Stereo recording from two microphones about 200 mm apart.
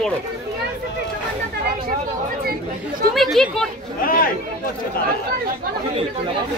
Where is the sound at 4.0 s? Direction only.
45° left (ahead or behind).